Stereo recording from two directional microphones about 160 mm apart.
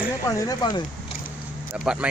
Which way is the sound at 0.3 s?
20° left (ahead or behind).